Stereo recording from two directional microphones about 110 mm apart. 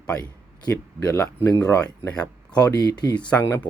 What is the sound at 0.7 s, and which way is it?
Speech, 25° left (ahead or behind).